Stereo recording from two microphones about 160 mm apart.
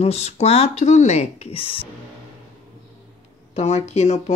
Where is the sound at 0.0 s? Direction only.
40° left (ahead or behind).